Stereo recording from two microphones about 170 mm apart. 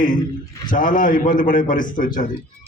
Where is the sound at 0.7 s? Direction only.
50° left (ahead or behind).